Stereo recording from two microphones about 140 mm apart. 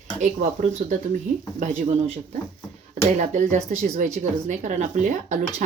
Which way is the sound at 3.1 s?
60° right (ahead or behind).